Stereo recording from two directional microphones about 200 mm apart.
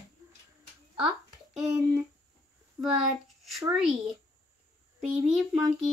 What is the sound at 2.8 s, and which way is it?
Speech, 15° right (ahead or behind).